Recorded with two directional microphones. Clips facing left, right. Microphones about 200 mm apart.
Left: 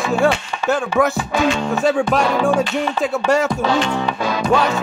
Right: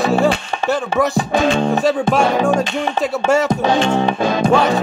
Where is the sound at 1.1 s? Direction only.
30° right (ahead or behind).